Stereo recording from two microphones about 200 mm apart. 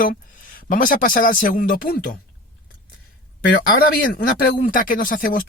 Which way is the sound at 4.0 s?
45° left (ahead or behind).